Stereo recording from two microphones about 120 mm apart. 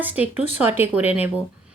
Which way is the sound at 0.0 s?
15° right (ahead or behind).